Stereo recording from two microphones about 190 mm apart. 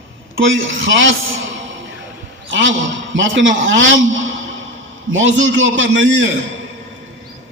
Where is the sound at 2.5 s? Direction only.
80° right.